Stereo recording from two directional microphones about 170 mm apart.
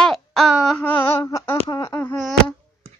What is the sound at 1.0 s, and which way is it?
A woman's voice, 15° left (ahead or behind).